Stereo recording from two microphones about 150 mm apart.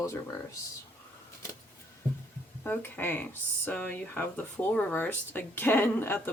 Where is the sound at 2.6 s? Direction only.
15° left (ahead or behind).